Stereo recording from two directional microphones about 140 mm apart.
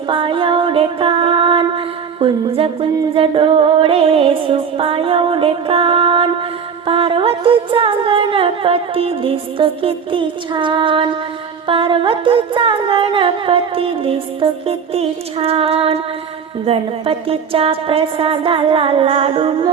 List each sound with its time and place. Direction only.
0.1 s music: 35° right (ahead or behind)